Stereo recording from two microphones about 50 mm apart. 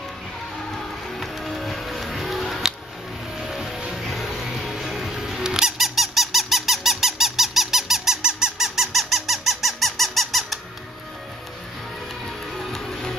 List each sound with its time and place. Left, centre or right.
0.7 s music: centre
4.9 s squeak: centre
12.5 s music: centre